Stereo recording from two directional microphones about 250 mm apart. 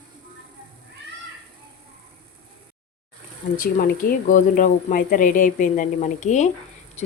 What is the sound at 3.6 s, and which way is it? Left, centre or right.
Speech, left.